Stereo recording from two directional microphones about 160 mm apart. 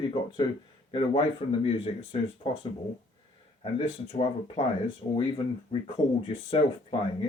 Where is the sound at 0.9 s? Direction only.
35° left (ahead or behind).